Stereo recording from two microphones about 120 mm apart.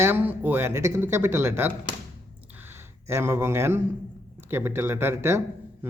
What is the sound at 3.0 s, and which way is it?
Speech, 20° right (ahead or behind).